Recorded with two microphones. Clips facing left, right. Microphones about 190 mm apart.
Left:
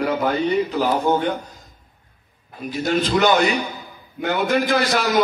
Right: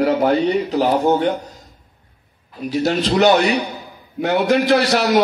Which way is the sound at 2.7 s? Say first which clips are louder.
Right 2 dB; 40° right (ahead or behind).